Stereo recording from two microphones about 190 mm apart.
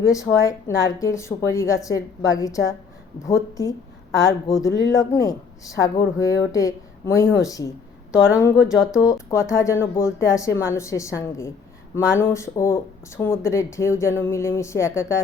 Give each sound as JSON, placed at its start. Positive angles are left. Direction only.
{"t": 0.0, "sound": "speech", "side_deg": 15}
{"t": 8.5, "sound": "speech", "side_deg": -5}
{"t": 9.0, "sound": "speech", "side_deg": 15}